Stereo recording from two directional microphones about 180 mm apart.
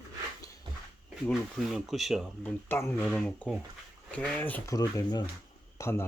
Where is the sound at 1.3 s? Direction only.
Centre (ahead or behind).